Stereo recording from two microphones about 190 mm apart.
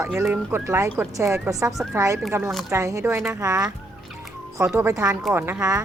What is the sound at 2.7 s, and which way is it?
Speech, 15° right (ahead or behind).